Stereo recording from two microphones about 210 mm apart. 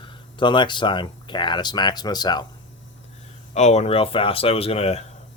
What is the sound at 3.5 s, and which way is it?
Speech, 30° left (ahead or behind).